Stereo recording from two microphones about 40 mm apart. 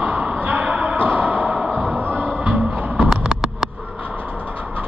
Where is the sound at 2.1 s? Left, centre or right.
Right.